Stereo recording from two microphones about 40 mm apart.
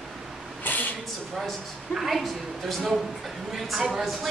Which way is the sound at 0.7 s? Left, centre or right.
Left.